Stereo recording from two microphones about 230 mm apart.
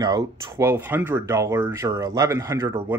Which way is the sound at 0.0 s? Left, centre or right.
Centre.